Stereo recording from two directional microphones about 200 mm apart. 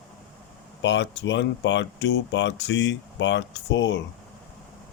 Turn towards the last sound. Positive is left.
turn(degrees=65)  # may be behind; listen again after turning